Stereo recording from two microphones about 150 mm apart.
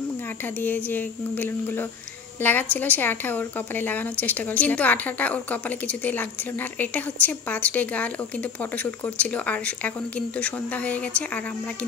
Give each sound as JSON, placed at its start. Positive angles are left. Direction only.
{"t": 0.6, "sound": "a woman's voice", "side_deg": 10}